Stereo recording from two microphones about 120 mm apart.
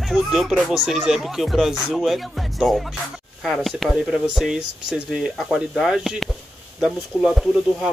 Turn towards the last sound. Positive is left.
turn(degrees=-5)  # may be behind; listen again after turning